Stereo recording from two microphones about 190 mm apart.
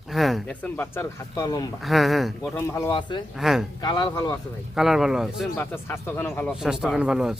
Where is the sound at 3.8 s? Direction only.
20° left (ahead or behind).